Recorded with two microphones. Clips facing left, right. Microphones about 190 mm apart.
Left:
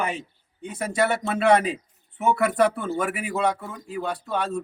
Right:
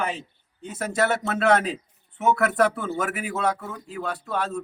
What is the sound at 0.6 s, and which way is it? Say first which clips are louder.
Speech: even; centre (ahead or behind).